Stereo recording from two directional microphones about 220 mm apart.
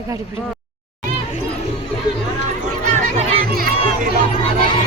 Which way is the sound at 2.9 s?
25° right (ahead or behind).